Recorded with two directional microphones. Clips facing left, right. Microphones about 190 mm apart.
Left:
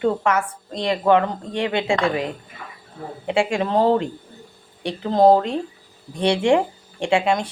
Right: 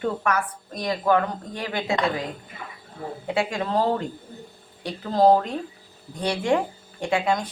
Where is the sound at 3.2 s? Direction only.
25° left (ahead or behind).